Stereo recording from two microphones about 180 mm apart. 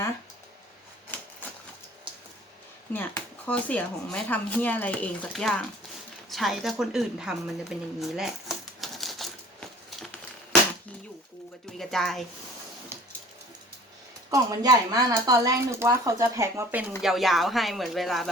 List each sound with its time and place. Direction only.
2.9 s speech: 10° left (ahead or behind)
6.3 s a sound: centre (ahead or behind)
11.8 s speech: centre (ahead or behind)
14.3 s speech: 20° right (ahead or behind)
17.0 s speech: centre (ahead or behind)